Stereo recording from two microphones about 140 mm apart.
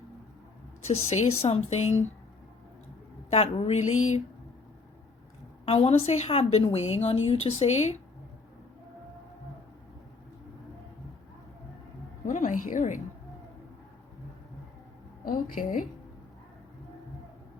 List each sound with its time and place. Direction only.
0.9 s a woman's voice: 50° left (ahead or behind)
3.2 s a woman's voice: 50° left (ahead or behind)
5.6 s a woman's voice: 45° left (ahead or behind)
12.2 s a sound: 70° left (ahead or behind)
15.2 s a woman's voice: 85° left